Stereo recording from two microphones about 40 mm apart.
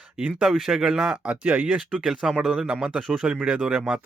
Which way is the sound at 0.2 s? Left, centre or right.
Right.